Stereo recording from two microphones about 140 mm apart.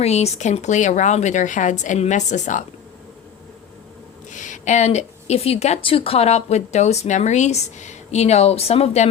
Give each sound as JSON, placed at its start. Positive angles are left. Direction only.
{"t": 0.0, "sound": "a woman's voice", "side_deg": 50}
{"t": 4.3, "sound": "speech", "side_deg": 65}